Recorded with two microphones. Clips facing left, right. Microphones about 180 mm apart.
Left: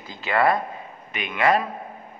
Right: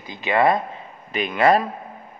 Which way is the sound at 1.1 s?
35° right (ahead or behind).